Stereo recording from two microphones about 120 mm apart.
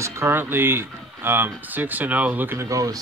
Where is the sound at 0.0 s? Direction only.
20° right (ahead or behind).